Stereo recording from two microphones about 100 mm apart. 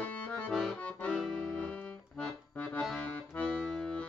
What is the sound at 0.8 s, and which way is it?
Accordion, 15° left (ahead or behind).